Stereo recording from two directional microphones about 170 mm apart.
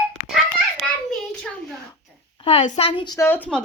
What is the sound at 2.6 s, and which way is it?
Speech, 45° left (ahead or behind).